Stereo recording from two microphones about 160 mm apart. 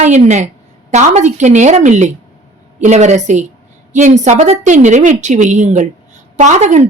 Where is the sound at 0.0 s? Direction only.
45° right (ahead or behind).